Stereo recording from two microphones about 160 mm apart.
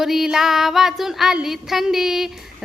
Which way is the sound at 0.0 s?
Centre (ahead or behind).